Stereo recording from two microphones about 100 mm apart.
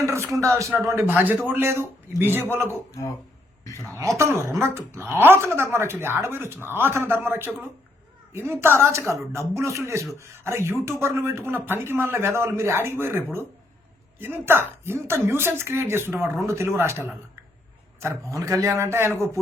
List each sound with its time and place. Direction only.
0.0 s a man's voice: 30° right (ahead or behind)
3.6 s a man's voice: 30° left (ahead or behind)
4.2 s a man's voice: 30° right (ahead or behind)